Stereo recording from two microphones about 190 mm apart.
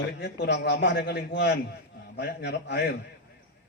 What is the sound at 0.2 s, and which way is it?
A man's voice, 65° left (ahead or behind).